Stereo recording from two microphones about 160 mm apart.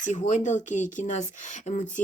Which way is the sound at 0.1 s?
50° left (ahead or behind).